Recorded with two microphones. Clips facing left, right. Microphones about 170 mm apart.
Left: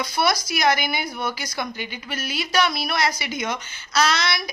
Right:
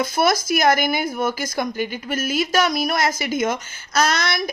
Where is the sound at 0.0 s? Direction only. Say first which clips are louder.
Right 4 dB; 50° right (ahead or behind).